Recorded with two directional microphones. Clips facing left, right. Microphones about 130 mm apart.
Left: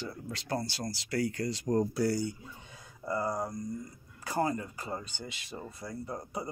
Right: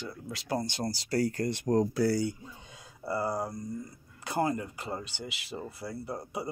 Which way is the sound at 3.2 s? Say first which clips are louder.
Right 1 dB; 10° right (ahead or behind).